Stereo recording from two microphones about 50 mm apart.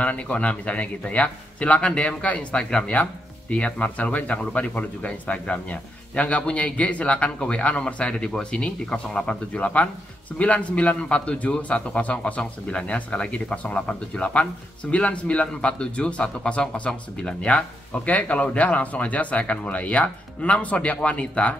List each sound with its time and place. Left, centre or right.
0.0 s speech: left